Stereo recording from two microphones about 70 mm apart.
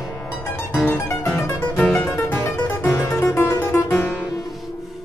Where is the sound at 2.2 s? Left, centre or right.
Left.